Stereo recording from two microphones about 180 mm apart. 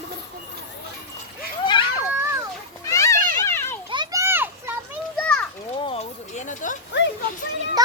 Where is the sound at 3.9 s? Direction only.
20° right (ahead or behind).